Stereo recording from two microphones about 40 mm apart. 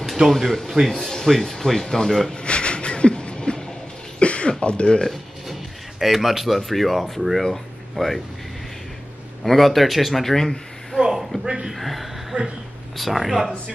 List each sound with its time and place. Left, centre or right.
0.5 s speech: centre
2.3 s a sound: left
4.2 s throat clearing: left
5.0 s speech: centre
9.4 s speech: centre
11.0 s a sound: centre
11.4 s speech: centre
11.7 s chuckle: centre
12.9 s speech: centre